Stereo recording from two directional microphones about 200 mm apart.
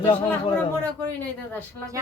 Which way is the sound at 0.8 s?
5° left (ahead or behind).